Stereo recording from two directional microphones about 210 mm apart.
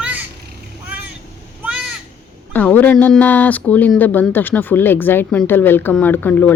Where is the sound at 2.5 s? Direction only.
10° left (ahead or behind).